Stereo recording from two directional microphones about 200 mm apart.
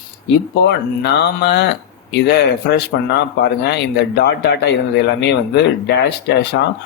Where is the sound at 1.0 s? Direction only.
55° left (ahead or behind).